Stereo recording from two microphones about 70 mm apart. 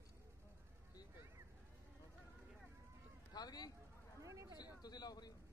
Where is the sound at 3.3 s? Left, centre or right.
Left.